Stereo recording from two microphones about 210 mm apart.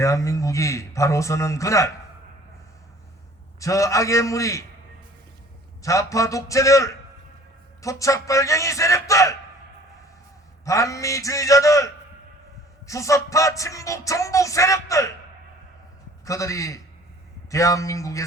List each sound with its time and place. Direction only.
0.0 s music: 15° left (ahead or behind)
3.6 s music: 15° left (ahead or behind)
5.8 s music: 15° left (ahead or behind)
10.7 s music: 15° left (ahead or behind)
12.9 s music: 15° left (ahead or behind)
16.2 s music: 15° left (ahead or behind)